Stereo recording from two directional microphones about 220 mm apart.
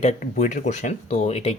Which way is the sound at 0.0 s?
30° left (ahead or behind).